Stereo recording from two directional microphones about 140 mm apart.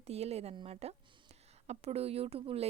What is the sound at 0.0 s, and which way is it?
Speech, 50° right (ahead or behind).